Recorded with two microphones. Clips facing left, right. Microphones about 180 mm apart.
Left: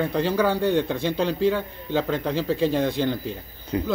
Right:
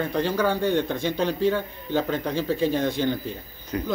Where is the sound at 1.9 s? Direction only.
5° right (ahead or behind).